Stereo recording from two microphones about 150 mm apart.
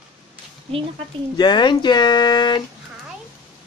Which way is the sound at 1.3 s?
30° left (ahead or behind).